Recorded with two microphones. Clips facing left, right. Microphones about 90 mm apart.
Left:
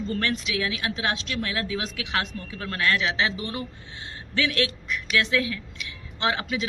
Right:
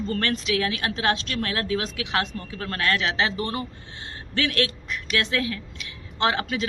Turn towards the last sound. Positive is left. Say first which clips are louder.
# right 2 dB
turn(degrees=-40)  # may be behind; listen again after turning